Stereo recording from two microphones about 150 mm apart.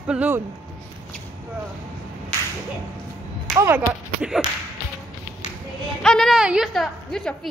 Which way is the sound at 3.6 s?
15° right (ahead or behind).